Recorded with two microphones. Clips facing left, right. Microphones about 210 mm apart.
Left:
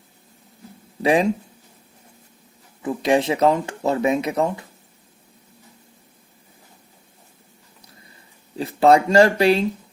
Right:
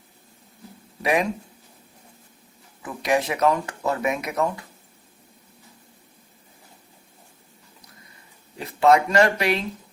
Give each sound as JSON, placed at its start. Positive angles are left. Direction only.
{"t": 1.0, "sound": "speech", "side_deg": 30}
{"t": 2.8, "sound": "speech", "side_deg": 25}
{"t": 8.5, "sound": "speech", "side_deg": 30}